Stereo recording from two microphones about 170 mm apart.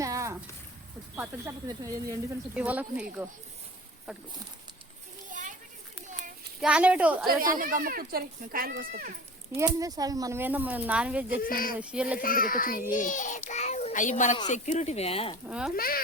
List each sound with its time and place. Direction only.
0.0 s a sound: 20° right (ahead or behind)
1.1 s speech: 10° right (ahead or behind)
2.6 s speech: 10° right (ahead or behind)
5.3 s children playing: 50° right (ahead or behind)
6.6 s speech: 5° right (ahead or behind)
7.3 s speech: 55° right (ahead or behind)
9.6 s speech: 20° right (ahead or behind)
11.4 s a child's voice: 55° left (ahead or behind)
11.8 s speech: 5° right (ahead or behind)
12.2 s a child's voice: 55° left (ahead or behind); by 15.4 s 35° left (ahead or behind)
15.4 s speech: 5° right (ahead or behind)
15.7 s a child's voice: 60° left (ahead or behind)